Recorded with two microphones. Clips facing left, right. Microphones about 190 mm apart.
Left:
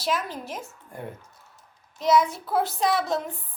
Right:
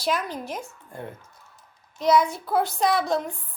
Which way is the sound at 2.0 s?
Centre (ahead or behind).